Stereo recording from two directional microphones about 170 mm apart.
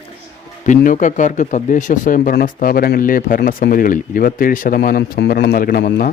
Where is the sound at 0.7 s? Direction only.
50° left (ahead or behind).